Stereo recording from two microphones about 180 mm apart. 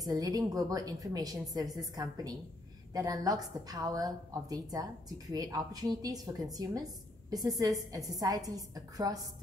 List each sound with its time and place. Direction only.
0.0 s a woman's voice: 20° right (ahead or behind)